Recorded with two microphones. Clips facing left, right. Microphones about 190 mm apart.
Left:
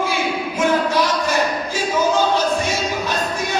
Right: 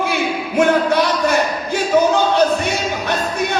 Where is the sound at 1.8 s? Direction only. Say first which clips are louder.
Right 4 dB; 60° right (ahead or behind).